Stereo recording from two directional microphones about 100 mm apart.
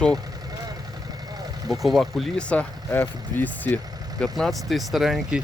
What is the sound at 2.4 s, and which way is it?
Speech, 10° left (ahead or behind).